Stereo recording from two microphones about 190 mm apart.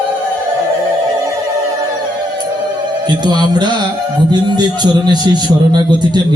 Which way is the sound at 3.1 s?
20° right (ahead or behind).